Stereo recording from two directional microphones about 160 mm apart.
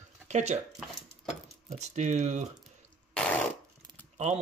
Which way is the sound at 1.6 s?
45° right (ahead or behind).